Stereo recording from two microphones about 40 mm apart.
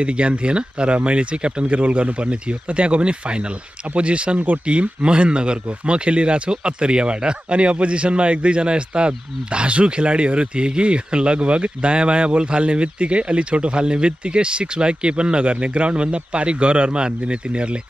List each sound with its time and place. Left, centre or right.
0.0 s speech: right